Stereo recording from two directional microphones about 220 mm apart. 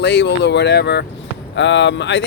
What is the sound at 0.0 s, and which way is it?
Speech, 50° left (ahead or behind).